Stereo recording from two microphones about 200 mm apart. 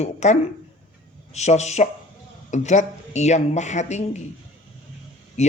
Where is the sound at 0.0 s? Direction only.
35° left (ahead or behind).